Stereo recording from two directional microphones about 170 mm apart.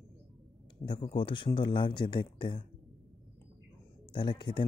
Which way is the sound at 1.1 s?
30° left (ahead or behind).